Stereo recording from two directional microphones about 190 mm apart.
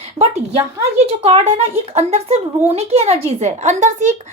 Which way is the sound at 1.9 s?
35° right (ahead or behind).